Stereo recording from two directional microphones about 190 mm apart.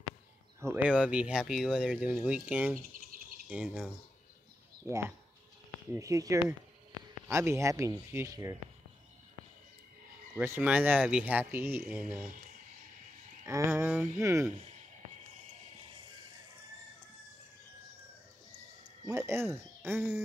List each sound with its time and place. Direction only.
0.6 s speech: 10° right (ahead or behind)
5.9 s speech: 15° right (ahead or behind)
10.3 s speech: 10° right (ahead or behind)
13.5 s speech: 15° right (ahead or behind)
19.0 s speech: 15° right (ahead or behind)